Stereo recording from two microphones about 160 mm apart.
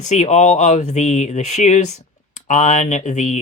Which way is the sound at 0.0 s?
45° left (ahead or behind).